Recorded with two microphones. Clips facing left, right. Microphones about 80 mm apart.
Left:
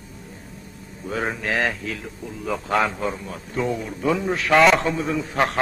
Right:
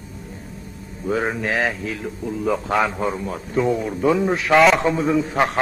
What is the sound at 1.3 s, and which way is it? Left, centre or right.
Speech, centre.